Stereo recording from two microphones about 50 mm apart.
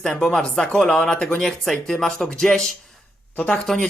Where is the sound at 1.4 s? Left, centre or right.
Centre.